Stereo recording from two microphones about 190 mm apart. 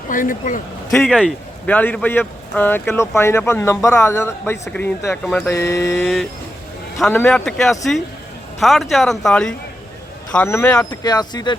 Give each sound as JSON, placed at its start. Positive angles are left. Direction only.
{"t": 0.1, "sound": "speech", "side_deg": 45}
{"t": 0.9, "sound": "speech", "side_deg": 0}
{"t": 11.0, "sound": "speech", "side_deg": 20}